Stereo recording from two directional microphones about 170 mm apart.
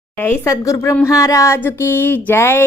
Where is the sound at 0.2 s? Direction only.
15° left (ahead or behind).